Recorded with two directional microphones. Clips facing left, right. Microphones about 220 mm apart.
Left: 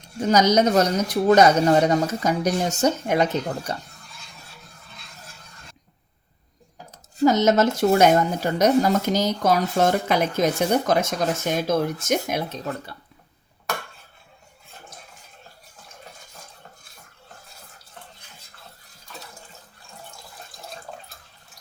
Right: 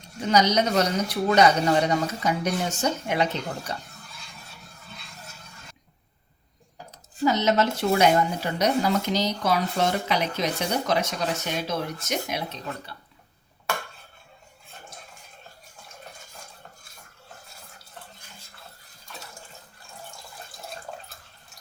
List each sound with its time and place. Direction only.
0.2 s speech: 45° left (ahead or behind)
7.3 s speech: 45° left (ahead or behind)